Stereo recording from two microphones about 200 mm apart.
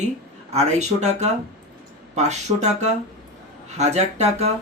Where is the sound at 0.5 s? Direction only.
35° right (ahead or behind).